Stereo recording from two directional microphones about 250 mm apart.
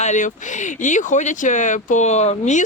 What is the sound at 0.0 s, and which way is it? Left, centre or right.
Speech, left.